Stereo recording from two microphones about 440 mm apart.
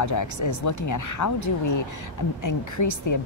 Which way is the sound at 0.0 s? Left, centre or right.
Left.